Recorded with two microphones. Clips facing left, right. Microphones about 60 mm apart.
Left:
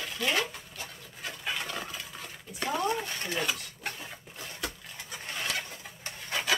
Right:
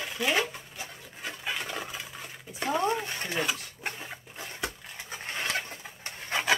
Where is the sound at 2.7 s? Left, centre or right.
Right.